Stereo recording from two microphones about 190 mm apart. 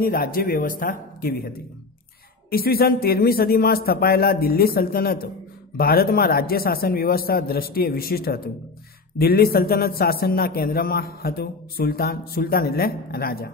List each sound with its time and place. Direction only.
0.0 s a man's voice: 50° left (ahead or behind)
2.5 s a man's voice: 50° left (ahead or behind)